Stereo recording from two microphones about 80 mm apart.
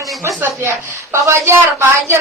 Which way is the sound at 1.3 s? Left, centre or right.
Right.